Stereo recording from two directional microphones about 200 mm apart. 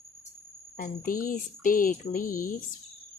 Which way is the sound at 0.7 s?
40° left (ahead or behind).